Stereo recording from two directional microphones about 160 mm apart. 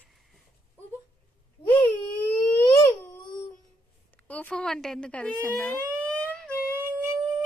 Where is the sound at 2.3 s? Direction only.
35° left (ahead or behind).